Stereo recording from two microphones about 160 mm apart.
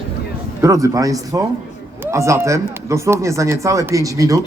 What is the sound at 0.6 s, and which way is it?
A man's voice, 20° right (ahead or behind).